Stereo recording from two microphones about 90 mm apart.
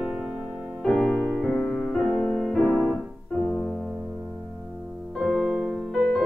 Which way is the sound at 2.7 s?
20° left (ahead or behind).